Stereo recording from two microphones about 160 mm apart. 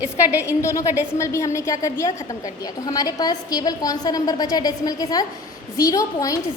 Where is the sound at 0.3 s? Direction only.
20° left (ahead or behind).